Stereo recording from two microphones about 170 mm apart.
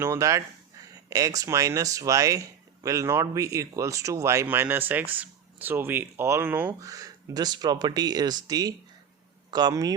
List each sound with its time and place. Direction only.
0.0 s speech: 15° right (ahead or behind)